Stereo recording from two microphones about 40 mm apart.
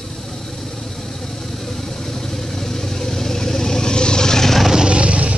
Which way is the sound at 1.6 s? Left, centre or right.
Centre.